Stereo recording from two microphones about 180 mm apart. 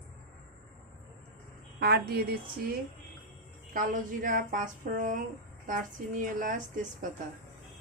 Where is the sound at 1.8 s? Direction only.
60° right (ahead or behind).